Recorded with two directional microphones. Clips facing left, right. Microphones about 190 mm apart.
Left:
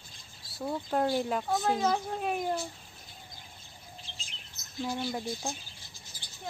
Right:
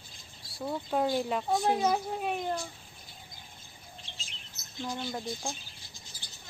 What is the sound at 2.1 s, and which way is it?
Speech, centre (ahead or behind).